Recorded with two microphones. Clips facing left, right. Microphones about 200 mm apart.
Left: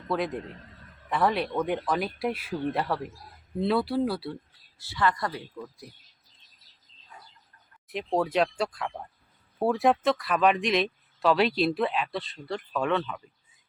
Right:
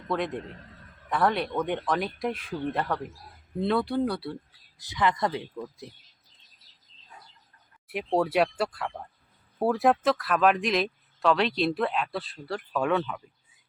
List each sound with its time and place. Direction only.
0.1 s speech: centre (ahead or behind)
4.8 s speech: 15° right (ahead or behind)
7.9 s speech: 10° right (ahead or behind)